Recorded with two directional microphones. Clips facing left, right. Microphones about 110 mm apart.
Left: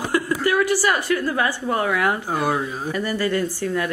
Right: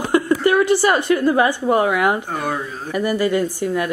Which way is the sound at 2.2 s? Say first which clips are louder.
Left 2 dB; 10° left (ahead or behind).